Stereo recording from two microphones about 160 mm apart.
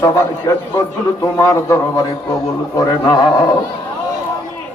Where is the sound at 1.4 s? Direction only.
20° left (ahead or behind).